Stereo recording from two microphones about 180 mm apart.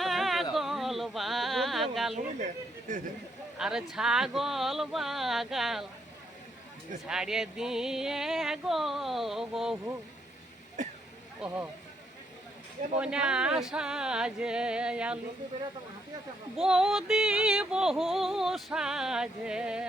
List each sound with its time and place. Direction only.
0.0 s a sound: centre (ahead or behind)
2.9 s speech: 50° right (ahead or behind)
3.6 s music: 5° right (ahead or behind)
7.1 s music: 5° right (ahead or behind)
11.3 s speech: 10° right (ahead or behind)
13.0 s music: 5° right (ahead or behind)
16.6 s music: 5° right (ahead or behind)